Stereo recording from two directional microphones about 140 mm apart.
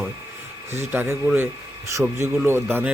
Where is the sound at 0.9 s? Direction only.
15° right (ahead or behind).